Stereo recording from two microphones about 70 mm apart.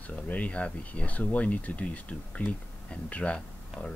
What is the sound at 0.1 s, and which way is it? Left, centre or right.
Speech, centre.